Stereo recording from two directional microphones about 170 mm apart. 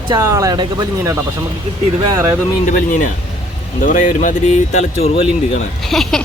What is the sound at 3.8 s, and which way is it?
Speech, 50° left (ahead or behind).